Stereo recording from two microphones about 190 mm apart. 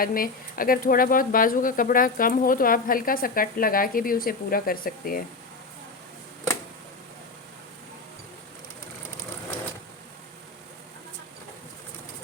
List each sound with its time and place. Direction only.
0.0 s speech: 50° left (ahead or behind)